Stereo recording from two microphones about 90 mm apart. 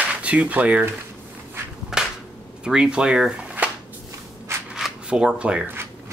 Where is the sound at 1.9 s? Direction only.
5° right (ahead or behind).